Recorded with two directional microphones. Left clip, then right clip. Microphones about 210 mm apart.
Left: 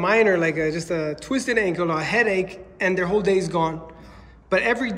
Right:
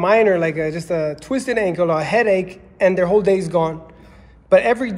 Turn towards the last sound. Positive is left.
turn(degrees=0)  # may be behind; listen again after turning